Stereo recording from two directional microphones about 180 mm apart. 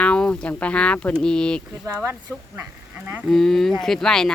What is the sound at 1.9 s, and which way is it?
Speech, 15° right (ahead or behind).